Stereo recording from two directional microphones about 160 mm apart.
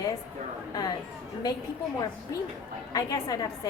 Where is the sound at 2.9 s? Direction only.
25° left (ahead or behind).